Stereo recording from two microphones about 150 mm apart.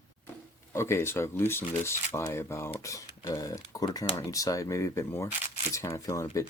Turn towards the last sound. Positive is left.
turn(degrees=20)  # may be behind; listen again after turning